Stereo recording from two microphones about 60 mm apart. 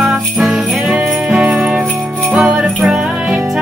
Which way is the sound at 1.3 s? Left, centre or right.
Centre.